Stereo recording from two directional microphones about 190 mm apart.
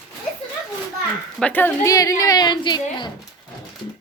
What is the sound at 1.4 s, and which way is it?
A woman's voice, 10° left (ahead or behind).